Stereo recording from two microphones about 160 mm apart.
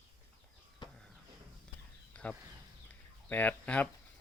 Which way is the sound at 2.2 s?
10° left (ahead or behind).